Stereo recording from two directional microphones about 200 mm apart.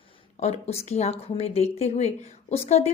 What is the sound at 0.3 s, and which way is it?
Speech, 35° left (ahead or behind).